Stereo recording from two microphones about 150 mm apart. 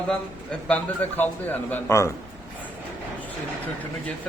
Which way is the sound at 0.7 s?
10° left (ahead or behind).